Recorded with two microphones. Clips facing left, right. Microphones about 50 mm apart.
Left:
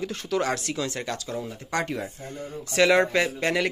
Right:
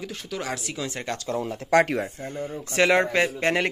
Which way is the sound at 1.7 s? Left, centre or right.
Right.